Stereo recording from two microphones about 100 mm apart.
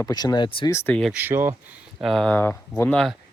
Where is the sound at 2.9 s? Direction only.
10° left (ahead or behind).